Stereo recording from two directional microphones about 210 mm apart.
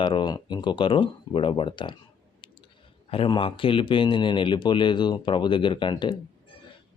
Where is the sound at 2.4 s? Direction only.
20° left (ahead or behind).